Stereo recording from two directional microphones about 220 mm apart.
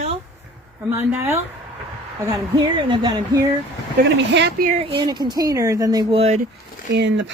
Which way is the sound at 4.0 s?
50° right (ahead or behind).